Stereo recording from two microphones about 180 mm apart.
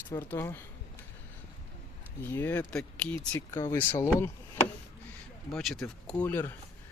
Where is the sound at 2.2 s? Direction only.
10° left (ahead or behind).